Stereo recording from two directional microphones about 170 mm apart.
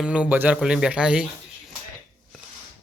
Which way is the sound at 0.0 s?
5° right (ahead or behind).